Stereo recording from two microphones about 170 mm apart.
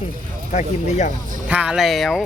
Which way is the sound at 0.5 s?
45° left (ahead or behind).